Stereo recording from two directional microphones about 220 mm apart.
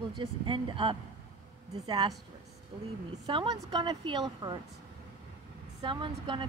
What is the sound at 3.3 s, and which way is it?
A woman's voice, 20° right (ahead or behind).